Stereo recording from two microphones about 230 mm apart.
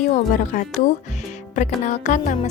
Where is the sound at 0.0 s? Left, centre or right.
Left.